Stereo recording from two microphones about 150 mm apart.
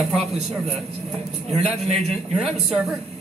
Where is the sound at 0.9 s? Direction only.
45° right (ahead or behind).